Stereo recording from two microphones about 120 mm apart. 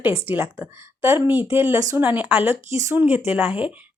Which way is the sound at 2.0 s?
15° right (ahead or behind).